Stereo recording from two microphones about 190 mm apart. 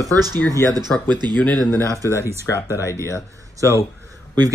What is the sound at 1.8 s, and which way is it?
Speech, 15° right (ahead or behind).